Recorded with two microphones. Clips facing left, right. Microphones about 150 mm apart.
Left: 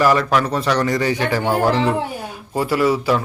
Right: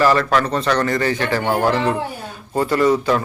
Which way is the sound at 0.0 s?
10° left (ahead or behind).